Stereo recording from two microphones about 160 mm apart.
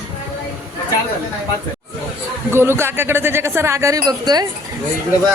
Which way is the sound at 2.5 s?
15° right (ahead or behind).